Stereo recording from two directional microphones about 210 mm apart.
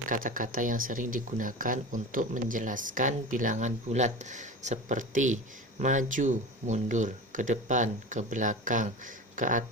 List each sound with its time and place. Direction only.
0.1 s speech: 40° right (ahead or behind)